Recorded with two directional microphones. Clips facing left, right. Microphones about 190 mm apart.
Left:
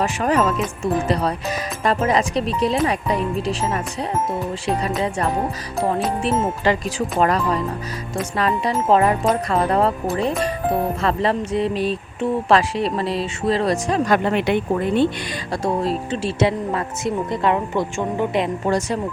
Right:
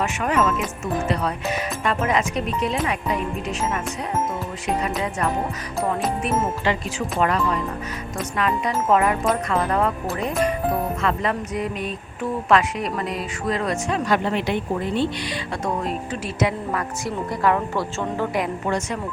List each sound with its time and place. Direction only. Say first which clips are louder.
0.0 s music: left 3 dB; 35° left (ahead or behind)
6.7 s music: left 4 dB; 40° left (ahead or behind); by 15.1 s 55° left (ahead or behind)
15.6 s speech: left 5 dB; 30° left (ahead or behind)